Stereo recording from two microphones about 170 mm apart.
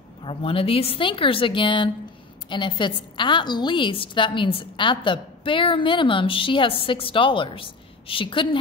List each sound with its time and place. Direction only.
0.2 s a woman's voice: 30° left (ahead or behind)